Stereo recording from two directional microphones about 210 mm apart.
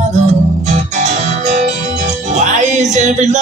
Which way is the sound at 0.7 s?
35° right (ahead or behind).